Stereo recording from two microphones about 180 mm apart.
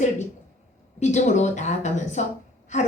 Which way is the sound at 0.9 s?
40° left (ahead or behind).